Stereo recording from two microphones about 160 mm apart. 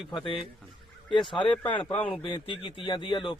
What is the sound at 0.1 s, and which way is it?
Speech, 30° left (ahead or behind).